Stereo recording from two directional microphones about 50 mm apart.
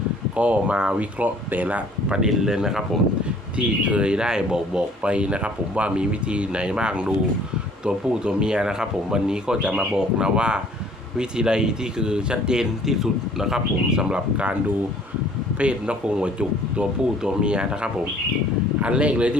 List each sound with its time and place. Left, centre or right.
0.3 s speech: right
3.6 s speech: right